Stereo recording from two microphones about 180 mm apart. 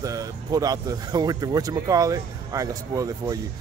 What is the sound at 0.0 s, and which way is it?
Speech, 20° right (ahead or behind).